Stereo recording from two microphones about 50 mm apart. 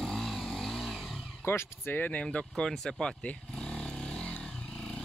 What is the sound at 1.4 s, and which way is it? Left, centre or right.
Speech, left.